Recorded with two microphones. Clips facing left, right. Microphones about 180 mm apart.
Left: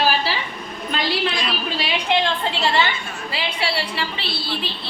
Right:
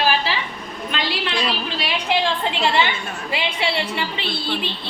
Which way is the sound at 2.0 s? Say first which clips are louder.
Even; 10° right (ahead or behind).